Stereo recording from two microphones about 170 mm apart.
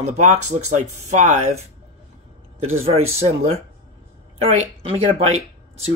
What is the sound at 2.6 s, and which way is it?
Speech, 35° right (ahead or behind).